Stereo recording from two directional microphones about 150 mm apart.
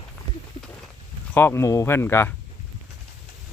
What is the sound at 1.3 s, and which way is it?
Speech, 15° left (ahead or behind).